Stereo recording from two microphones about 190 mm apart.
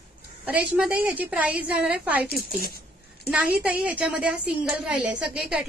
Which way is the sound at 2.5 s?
50° left (ahead or behind).